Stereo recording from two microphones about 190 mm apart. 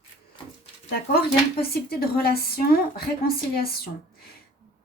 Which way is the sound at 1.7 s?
55° left (ahead or behind).